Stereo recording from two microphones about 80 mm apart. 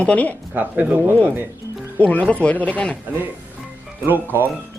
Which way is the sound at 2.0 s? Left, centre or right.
Centre.